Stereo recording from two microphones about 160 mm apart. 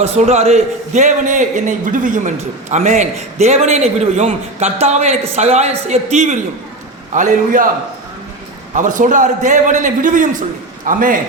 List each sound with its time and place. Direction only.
0.0 s a man's voice: 45° right (ahead or behind)
8.7 s a man's voice: 55° right (ahead or behind)